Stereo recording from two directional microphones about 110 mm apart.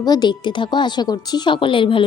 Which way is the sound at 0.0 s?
40° left (ahead or behind).